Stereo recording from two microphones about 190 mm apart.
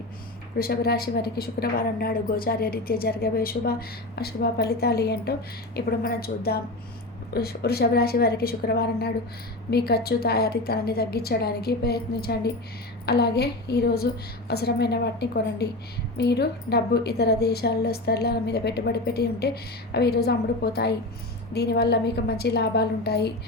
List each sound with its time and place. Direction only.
0.6 s a woman's voice: 55° left (ahead or behind)